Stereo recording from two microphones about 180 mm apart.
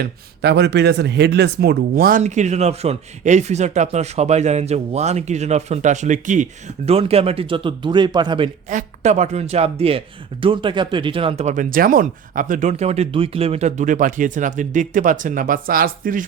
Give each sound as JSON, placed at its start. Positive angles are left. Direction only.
{"t": 0.0, "sound": "speech", "side_deg": -70}
{"t": 8.7, "sound": "speech", "side_deg": -40}